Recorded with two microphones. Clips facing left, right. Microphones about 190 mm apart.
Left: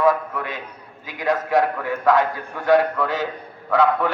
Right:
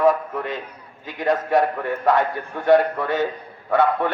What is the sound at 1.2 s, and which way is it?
Speech, 90° left.